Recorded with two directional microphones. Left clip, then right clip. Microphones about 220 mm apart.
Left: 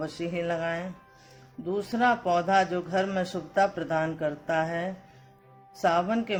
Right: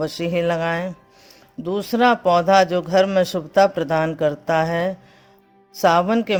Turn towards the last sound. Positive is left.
turn(degrees=-40)  # may be behind; listen again after turning